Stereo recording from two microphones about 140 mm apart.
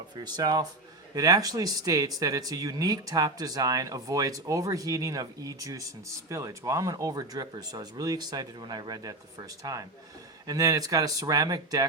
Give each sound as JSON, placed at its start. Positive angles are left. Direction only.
{"t": 0.3, "sound": "speech", "side_deg": -30}